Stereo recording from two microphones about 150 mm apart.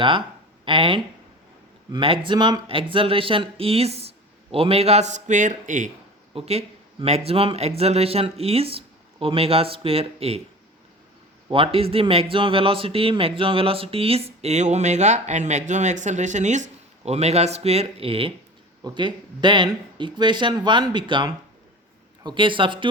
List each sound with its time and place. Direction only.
0.6 s a man's voice: 35° right (ahead or behind); by 5.9 s 55° right (ahead or behind)
6.3 s a man's voice: 45° right (ahead or behind)
11.5 s a man's voice: 40° right (ahead or behind)